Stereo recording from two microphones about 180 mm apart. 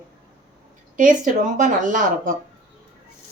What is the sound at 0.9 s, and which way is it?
Speech, 45° right (ahead or behind).